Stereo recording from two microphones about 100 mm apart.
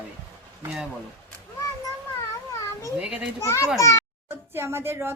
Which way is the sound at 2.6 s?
30° left (ahead or behind).